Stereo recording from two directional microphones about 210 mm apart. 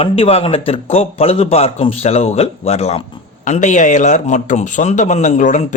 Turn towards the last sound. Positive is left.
turn(degrees=35)  # may be behind; listen again after turning